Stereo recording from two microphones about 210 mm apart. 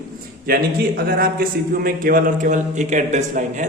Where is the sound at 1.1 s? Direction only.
45° right (ahead or behind).